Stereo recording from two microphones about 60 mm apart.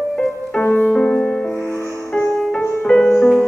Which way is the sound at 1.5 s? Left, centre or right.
Left.